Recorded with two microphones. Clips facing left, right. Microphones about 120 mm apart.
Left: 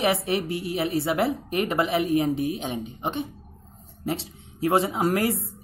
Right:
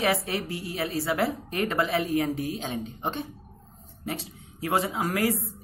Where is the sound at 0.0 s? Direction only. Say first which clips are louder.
Left 3 dB; 25° left (ahead or behind).